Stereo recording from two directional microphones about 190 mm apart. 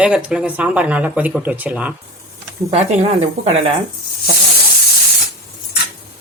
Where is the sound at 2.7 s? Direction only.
35° right (ahead or behind).